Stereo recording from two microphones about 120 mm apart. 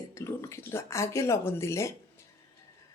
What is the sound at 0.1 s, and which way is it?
Speech, 25° left (ahead or behind).